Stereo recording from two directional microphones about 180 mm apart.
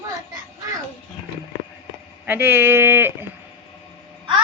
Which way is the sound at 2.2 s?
10° right (ahead or behind).